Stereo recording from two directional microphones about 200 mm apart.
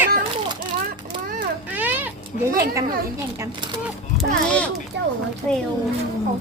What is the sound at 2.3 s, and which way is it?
Speech, 40° left (ahead or behind).